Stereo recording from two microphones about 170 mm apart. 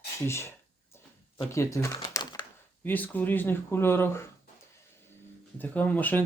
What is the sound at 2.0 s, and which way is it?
Crumpling, 25° left (ahead or behind).